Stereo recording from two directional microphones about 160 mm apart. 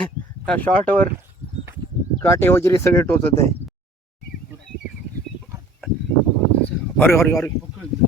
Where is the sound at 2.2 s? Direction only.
15° left (ahead or behind).